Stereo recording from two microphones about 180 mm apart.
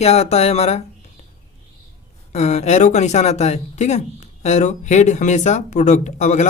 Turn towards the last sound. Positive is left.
turn(degrees=40)  # may be behind; listen again after turning